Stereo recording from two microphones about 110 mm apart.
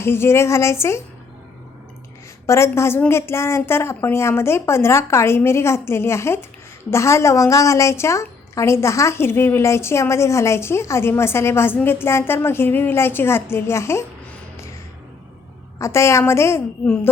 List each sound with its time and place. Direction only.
0.0 s a woman's voice: 20° left (ahead or behind)
2.5 s a woman's voice: 25° left (ahead or behind)
15.8 s a woman's voice: 25° left (ahead or behind)
16.8 s speech: 15° left (ahead or behind)